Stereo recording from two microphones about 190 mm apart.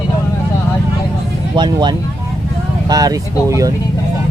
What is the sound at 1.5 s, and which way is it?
Speech, 25° right (ahead or behind).